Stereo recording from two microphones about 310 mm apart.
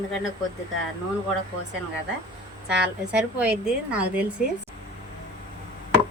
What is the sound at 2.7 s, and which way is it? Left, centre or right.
A woman's voice, centre.